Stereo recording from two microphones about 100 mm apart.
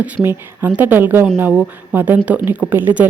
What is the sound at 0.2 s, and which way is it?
A woman's voice, 20° right (ahead or behind).